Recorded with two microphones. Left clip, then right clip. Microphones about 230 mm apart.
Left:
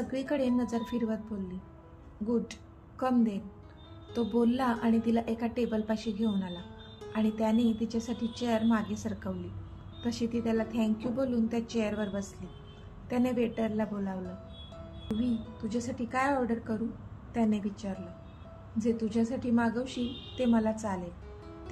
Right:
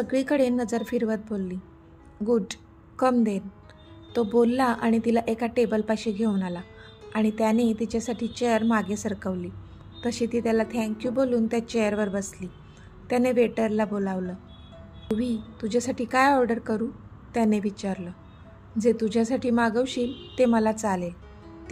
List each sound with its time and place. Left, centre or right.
0.1 s a woman's voice: right